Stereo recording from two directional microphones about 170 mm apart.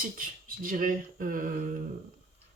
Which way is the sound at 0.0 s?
55° right (ahead or behind).